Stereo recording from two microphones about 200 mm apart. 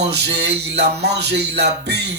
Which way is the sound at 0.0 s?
60° right (ahead or behind).